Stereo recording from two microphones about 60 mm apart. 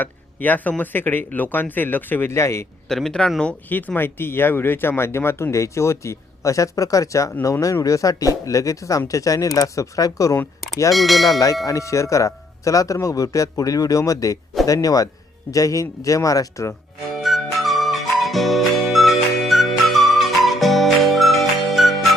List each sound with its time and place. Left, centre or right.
0.0 s speech: left
2.3 s speech: left
2.9 s speech: centre
3.7 s speech: left
10.9 s speech: centre
11.6 s speech: left
14.7 s a man's voice: left
15.5 s speech: left
17.2 s music: centre